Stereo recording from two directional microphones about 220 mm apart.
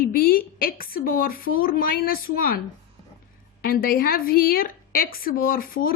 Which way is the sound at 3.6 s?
45° left (ahead or behind).